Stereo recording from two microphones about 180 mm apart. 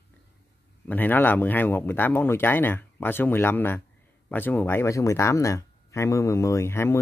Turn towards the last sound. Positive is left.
turn(degrees=15)  # may be behind; listen again after turning